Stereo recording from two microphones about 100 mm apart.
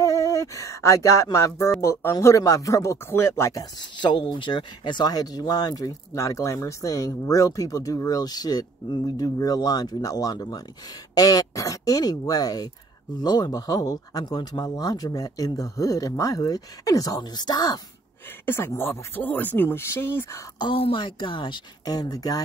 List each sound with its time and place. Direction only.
0.0 s speech: 35° left (ahead or behind)
4.0 s speech: 50° left (ahead or behind)
18.4 s speech: 25° left (ahead or behind)
20.7 s speech: 65° left (ahead or behind)
21.8 s speech: 40° left (ahead or behind)